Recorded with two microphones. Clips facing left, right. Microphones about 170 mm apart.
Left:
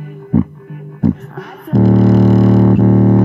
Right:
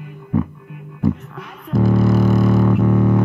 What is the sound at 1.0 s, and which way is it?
Music, 45° left (ahead or behind).